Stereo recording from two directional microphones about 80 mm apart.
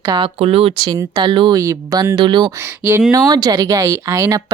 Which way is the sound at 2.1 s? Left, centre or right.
Right.